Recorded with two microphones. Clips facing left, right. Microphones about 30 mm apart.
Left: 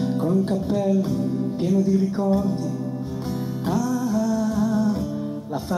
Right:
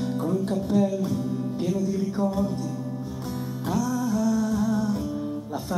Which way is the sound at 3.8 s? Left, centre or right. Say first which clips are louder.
Left 2 dB; centre.